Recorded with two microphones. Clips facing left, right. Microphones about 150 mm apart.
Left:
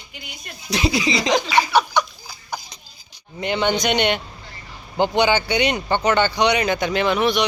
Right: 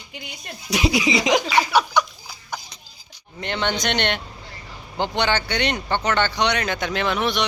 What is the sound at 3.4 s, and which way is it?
Speech, 10° left (ahead or behind).